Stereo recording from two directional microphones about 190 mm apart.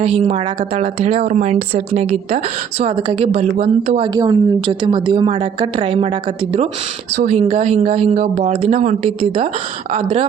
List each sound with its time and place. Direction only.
0.0 s a woman's voice: 35° right (ahead or behind)
7.2 s speech: 35° right (ahead or behind)